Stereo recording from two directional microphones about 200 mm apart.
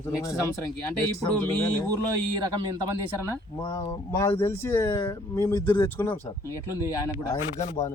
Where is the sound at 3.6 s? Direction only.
20° left (ahead or behind).